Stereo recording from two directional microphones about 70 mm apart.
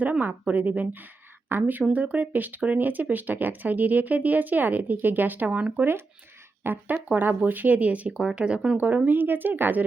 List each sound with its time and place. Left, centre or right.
0.0 s speech: right
6.6 s speech: right; by 8.8 s centre
8.8 s speech: right